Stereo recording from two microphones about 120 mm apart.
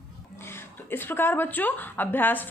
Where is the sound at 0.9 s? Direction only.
15° left (ahead or behind).